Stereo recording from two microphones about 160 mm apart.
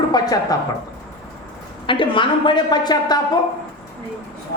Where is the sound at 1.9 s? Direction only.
30° left (ahead or behind).